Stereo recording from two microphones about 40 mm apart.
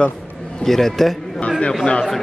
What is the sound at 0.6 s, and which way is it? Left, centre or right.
Speech, centre.